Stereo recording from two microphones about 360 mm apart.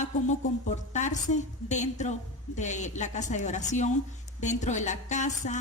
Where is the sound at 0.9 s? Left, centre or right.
Centre.